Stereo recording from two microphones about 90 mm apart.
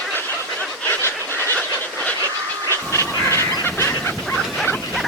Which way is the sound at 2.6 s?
30° left (ahead or behind).